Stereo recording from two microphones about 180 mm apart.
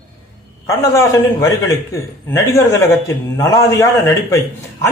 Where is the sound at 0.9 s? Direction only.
15° left (ahead or behind).